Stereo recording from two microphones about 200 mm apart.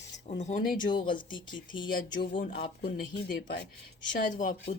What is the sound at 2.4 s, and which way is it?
Speech, 50° left (ahead or behind).